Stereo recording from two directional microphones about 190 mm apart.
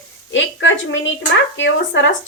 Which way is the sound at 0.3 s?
75° left (ahead or behind).